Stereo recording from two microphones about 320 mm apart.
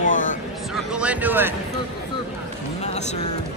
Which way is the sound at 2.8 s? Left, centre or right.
Left.